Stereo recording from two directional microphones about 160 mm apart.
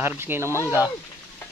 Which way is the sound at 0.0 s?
15° right (ahead or behind).